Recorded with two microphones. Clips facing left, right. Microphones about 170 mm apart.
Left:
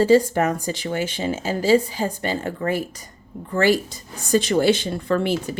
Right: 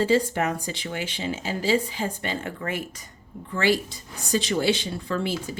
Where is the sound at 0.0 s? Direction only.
40° left (ahead or behind).